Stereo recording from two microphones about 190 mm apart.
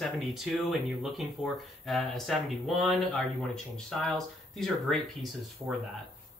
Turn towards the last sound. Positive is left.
turn(degrees=0)  # may be behind; listen again after turning